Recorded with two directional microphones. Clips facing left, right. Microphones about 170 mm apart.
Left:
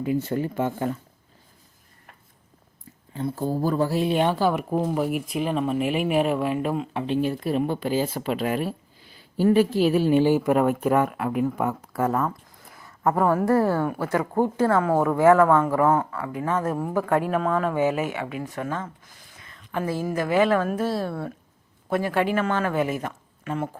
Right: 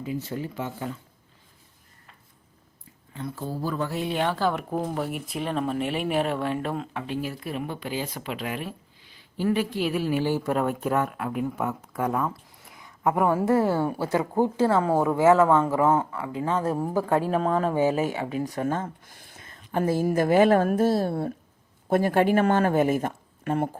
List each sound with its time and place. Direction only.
0.0 s speech: 55° left (ahead or behind)
3.1 s speech: 30° left (ahead or behind); by 4.6 s 15° left (ahead or behind)
4.7 s speech: 5° left (ahead or behind)
6.9 s speech: 25° left (ahead or behind); by 21.1 s 45° right (ahead or behind)
21.1 s speech: 30° right (ahead or behind)
21.8 s speech: 45° right (ahead or behind)